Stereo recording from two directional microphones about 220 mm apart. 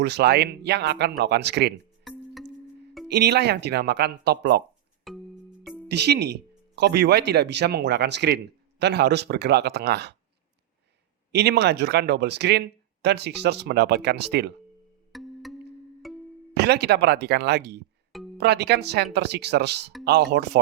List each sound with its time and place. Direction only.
0.0 s speech: 50° right (ahead or behind)
2.0 s music: centre (ahead or behind)
3.1 s speech: 50° right (ahead or behind)
5.1 s music: centre (ahead or behind)
5.9 s speech: 50° right (ahead or behind)
11.3 s speech: 50° right (ahead or behind)
15.1 s music: centre (ahead or behind)
16.6 s speech: 50° right (ahead or behind)